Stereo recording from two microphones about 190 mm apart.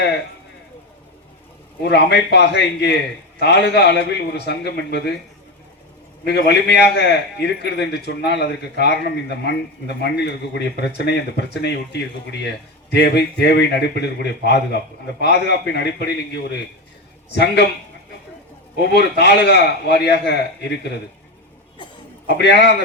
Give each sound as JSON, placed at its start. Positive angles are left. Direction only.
{"t": 1.8, "sound": "a man's voice", "side_deg": 60}
{"t": 6.2, "sound": "a man's voice", "side_deg": 60}
{"t": 18.8, "sound": "a man's voice", "side_deg": 60}
{"t": 22.4, "sound": "a man's voice", "side_deg": 65}